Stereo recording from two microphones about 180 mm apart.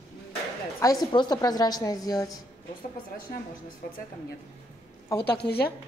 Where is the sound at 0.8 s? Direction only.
20° left (ahead or behind).